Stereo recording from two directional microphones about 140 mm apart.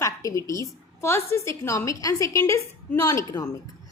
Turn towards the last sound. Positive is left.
turn(degrees=25)  # may be behind; listen again after turning